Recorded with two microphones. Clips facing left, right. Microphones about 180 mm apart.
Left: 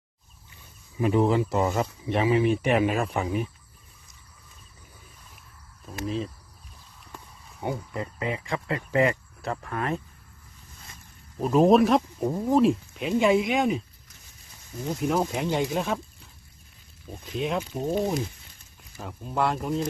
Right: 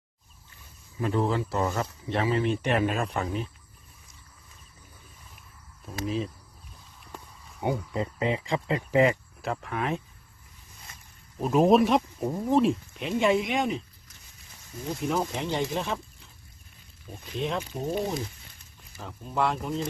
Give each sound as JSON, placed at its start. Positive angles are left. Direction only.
{"t": 0.9, "sound": "speech", "side_deg": 15}
{"t": 5.8, "sound": "speech", "side_deg": 0}
{"t": 7.6, "sound": "speech", "side_deg": -25}
{"t": 9.4, "sound": "speech", "side_deg": 0}
{"t": 11.3, "sound": "speech", "side_deg": 0}
{"t": 14.9, "sound": "speech", "side_deg": 5}
{"t": 17.4, "sound": "speech", "side_deg": 5}
{"t": 19.0, "sound": "speech", "side_deg": 5}